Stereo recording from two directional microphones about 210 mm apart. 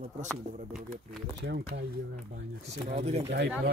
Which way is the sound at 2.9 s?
30° right (ahead or behind).